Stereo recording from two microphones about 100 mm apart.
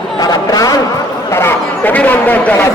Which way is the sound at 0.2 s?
40° left (ahead or behind).